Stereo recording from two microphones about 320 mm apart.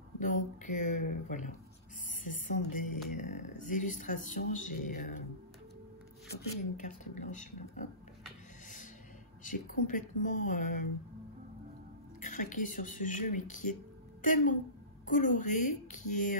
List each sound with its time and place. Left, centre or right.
0.2 s speech: left
2.2 s speech: left
6.2 s speech: left
9.4 s speech: left
12.3 s speech: left